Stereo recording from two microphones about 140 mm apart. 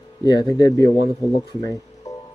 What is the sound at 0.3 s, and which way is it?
Speech, 30° left (ahead or behind).